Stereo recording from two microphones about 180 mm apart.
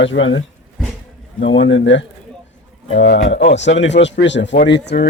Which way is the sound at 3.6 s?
90° left.